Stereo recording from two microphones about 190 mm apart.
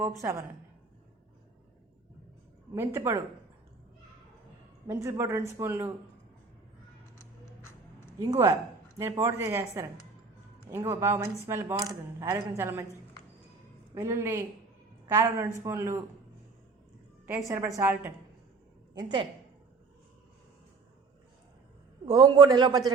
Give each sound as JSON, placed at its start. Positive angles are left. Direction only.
{"t": 0.2, "sound": "speech", "side_deg": -15}
{"t": 2.7, "sound": "speech", "side_deg": -15}
{"t": 4.9, "sound": "speech", "side_deg": -15}
{"t": 9.0, "sound": "speech", "side_deg": -15}
{"t": 13.9, "sound": "a woman's voice", "side_deg": -15}
{"t": 17.2, "sound": "speech", "side_deg": -10}
{"t": 18.9, "sound": "a man's voice", "side_deg": -25}
{"t": 22.0, "sound": "a man's voice", "side_deg": -25}